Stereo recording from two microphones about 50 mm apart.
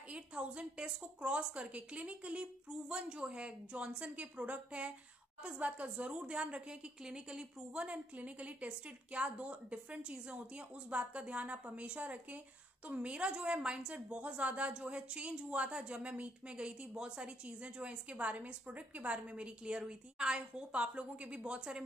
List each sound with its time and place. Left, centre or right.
0.1 s a woman's voice: right